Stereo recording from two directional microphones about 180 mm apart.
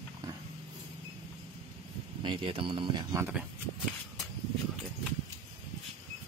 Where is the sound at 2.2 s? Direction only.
30° right (ahead or behind).